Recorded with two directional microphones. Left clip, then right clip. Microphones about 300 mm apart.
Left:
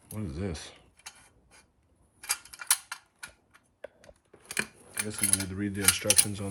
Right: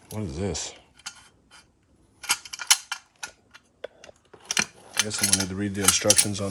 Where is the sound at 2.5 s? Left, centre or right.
Right.